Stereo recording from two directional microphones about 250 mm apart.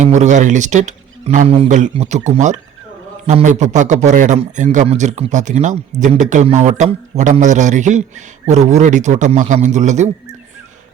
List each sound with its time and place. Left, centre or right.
0.0 s a man's voice: right